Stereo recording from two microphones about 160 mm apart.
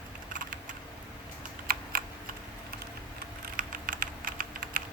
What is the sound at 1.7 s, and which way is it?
Typing, 65° right (ahead or behind).